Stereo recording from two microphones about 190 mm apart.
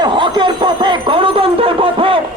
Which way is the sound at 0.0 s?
25° right (ahead or behind).